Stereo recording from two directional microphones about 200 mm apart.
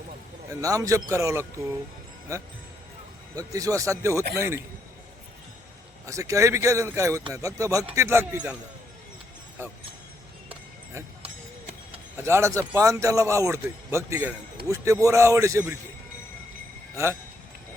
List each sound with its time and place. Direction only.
0.6 s speech: 15° right (ahead or behind)
6.1 s speech: 15° right (ahead or behind)
11.9 s speech: 15° right (ahead or behind)
16.9 s speech: 15° right (ahead or behind)